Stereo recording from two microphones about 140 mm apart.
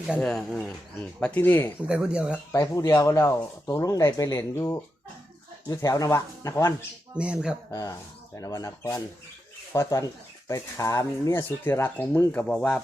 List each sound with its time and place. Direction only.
0.2 s speech: 5° left (ahead or behind)
1.9 s speech: 5° right (ahead or behind)
2.5 s speech: 25° left (ahead or behind)
7.2 s speech: 5° right (ahead or behind)
7.7 s speech: 25° left (ahead or behind); by 12.8 s 5° left (ahead or behind)